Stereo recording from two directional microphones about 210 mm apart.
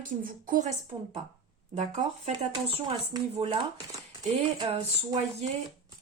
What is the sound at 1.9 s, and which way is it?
Speech, 25° right (ahead or behind).